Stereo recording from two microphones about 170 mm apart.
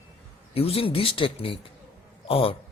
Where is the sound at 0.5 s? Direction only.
35° left (ahead or behind).